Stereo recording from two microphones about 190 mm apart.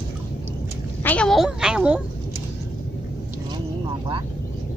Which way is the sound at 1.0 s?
5° left (ahead or behind).